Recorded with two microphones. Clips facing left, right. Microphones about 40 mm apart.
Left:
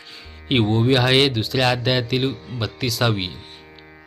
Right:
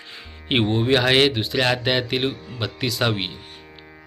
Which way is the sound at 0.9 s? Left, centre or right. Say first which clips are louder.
Right 1 dB; centre.